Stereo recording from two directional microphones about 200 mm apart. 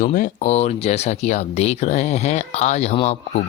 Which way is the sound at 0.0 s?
40° left (ahead or behind).